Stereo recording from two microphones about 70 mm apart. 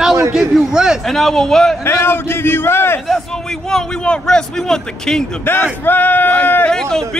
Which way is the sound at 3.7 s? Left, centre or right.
Centre.